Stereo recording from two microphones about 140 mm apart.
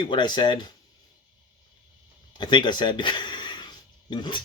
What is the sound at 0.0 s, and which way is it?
Speech, 35° left (ahead or behind).